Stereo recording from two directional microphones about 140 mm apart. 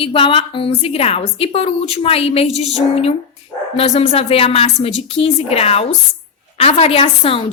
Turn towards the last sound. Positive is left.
turn(degrees=45)  # may be behind; listen again after turning